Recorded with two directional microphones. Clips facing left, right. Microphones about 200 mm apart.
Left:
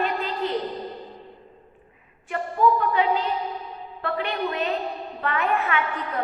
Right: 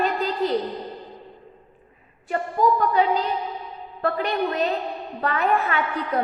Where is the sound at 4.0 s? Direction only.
40° right (ahead or behind).